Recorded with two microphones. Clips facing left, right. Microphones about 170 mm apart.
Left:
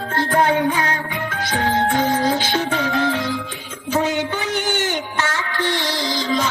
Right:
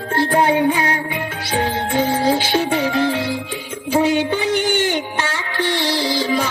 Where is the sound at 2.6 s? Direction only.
10° right (ahead or behind).